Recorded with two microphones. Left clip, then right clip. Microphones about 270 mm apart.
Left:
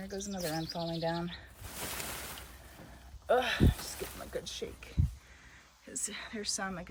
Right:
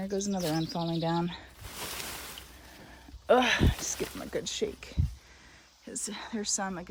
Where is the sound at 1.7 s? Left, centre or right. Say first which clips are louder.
Right 2 dB; centre.